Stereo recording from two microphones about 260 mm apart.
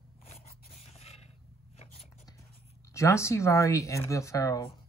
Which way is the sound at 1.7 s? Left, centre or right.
Left.